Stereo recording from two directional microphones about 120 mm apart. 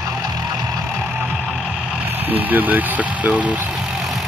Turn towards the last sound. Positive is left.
turn(degrees=-10)  # may be behind; listen again after turning